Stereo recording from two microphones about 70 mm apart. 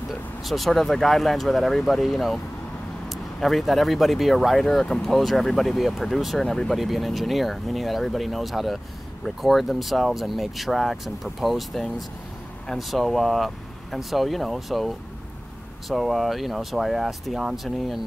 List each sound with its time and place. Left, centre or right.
0.5 s speech: centre